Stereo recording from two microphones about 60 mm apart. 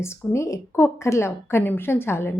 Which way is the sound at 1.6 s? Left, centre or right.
Left.